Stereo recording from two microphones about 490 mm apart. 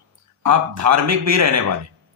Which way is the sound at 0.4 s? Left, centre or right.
Right.